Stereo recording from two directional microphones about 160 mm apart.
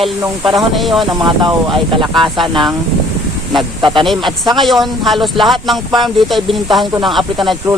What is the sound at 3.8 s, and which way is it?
Speech, 30° right (ahead or behind).